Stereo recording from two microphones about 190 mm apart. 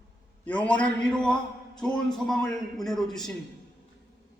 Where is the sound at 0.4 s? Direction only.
5° left (ahead or behind).